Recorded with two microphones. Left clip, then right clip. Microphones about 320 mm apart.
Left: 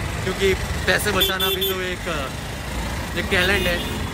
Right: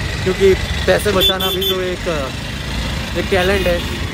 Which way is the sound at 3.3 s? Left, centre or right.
Centre.